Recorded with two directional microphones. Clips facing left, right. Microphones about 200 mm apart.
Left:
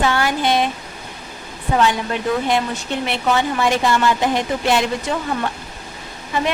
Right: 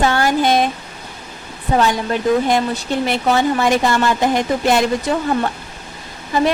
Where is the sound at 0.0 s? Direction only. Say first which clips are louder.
Right 3 dB; 40° right (ahead or behind).